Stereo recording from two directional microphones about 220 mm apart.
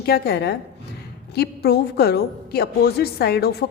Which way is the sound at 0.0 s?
45° left (ahead or behind).